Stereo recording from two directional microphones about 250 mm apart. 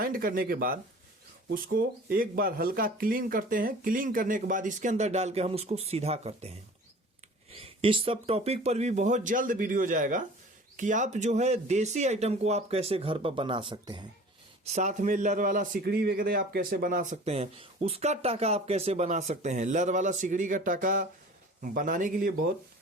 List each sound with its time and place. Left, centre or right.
0.0 s a man's voice: right